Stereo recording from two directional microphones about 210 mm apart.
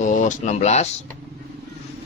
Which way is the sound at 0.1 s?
35° left (ahead or behind).